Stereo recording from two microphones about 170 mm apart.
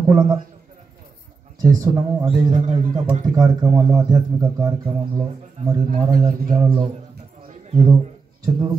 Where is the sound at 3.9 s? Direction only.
25° right (ahead or behind).